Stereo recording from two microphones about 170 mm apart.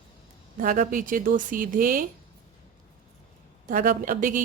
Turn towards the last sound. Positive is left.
turn(degrees=-50)  # may be behind; listen again after turning